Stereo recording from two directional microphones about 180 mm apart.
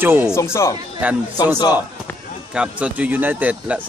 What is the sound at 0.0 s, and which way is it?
Speech, 10° right (ahead or behind).